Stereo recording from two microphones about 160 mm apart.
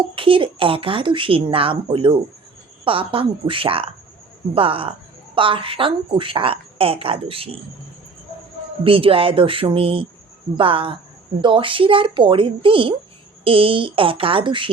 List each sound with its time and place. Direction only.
0.2 s a woman's voice: 35° right (ahead or behind)
8.8 s a woman's voice: 35° right (ahead or behind)